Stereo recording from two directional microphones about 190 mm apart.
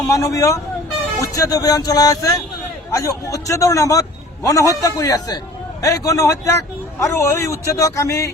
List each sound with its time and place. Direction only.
0.0 s a man's voice: 15° left (ahead or behind)